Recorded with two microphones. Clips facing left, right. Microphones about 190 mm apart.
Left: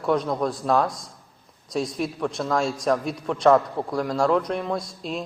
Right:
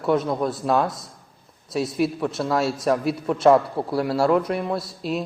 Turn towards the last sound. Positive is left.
turn(degrees=-5)  # may be behind; listen again after turning